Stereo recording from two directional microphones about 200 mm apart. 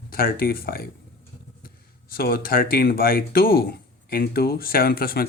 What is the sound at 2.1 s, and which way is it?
Speech, 50° left (ahead or behind).